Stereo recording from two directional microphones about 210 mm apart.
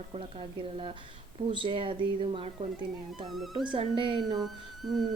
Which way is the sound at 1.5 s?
25° right (ahead or behind).